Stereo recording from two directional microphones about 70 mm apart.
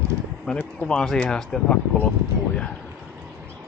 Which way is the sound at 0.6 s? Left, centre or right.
Centre.